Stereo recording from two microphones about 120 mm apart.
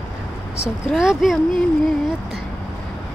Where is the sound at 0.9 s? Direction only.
5° right (ahead or behind).